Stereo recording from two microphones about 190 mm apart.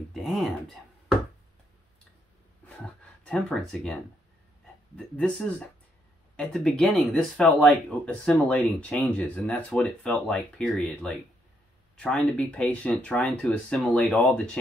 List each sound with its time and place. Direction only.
0.1 s speech: centre (ahead or behind)
2.8 s speech: 5° left (ahead or behind)